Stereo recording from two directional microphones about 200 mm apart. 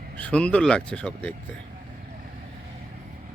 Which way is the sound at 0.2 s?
5° left (ahead or behind).